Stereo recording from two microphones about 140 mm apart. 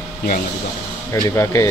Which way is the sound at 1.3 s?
20° left (ahead or behind).